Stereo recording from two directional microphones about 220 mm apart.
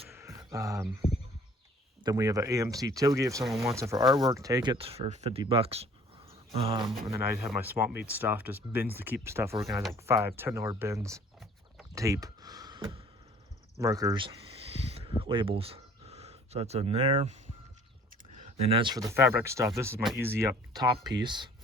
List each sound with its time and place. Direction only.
0.1 s a sound: 15° right (ahead or behind)
2.0 s speech: 15° right (ahead or behind)
7.6 s speech: 10° right (ahead or behind)
9.6 s speech: centre (ahead or behind)
10.0 s speech: 10° right (ahead or behind)
11.9 s a sound: 15° right (ahead or behind)
15.2 s speech: 25° right (ahead or behind)